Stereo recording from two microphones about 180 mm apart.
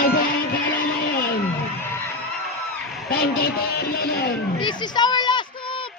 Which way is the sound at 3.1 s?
55° left (ahead or behind).